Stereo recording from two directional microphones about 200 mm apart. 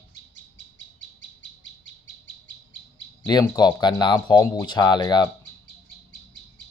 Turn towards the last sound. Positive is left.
turn(degrees=20)  # may be behind; listen again after turning